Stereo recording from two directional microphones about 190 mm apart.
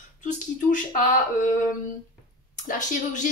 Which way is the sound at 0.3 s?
45° left (ahead or behind).